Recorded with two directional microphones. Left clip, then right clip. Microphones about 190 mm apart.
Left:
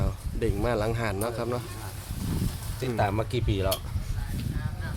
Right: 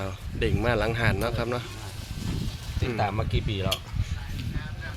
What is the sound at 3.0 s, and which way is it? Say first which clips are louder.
Speech: left 2 dB; 55° left (ahead or behind).